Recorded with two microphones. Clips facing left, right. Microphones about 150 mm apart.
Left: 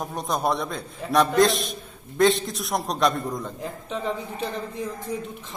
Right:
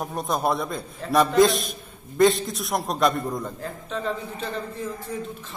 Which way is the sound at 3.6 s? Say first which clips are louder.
Left 2 dB; 15° left (ahead or behind).